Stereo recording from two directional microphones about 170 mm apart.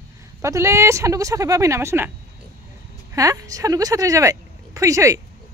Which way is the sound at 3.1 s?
20° right (ahead or behind).